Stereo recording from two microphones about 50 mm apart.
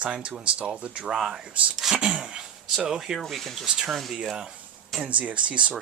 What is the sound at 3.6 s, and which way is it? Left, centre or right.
Speech, centre.